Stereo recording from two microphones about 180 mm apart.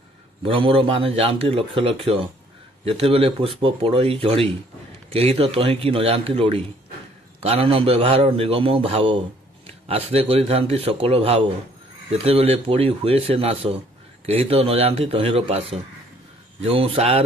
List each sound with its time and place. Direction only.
0.4 s speech: 30° right (ahead or behind)